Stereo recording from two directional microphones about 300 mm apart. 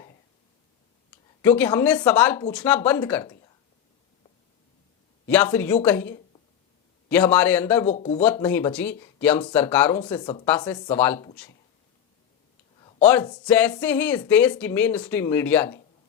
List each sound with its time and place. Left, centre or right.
1.4 s speech: centre
5.3 s speech: centre
7.9 s speech: left
8.2 s speech: centre
12.8 s speech: centre